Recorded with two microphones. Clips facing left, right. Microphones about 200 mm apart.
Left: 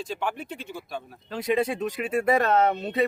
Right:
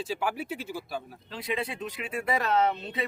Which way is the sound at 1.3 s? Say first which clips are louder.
Left 8 dB; 45° left (ahead or behind).